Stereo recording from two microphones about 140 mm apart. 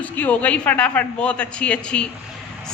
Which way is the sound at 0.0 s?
10° left (ahead or behind).